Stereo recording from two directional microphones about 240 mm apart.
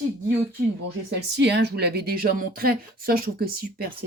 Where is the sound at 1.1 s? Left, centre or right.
Right.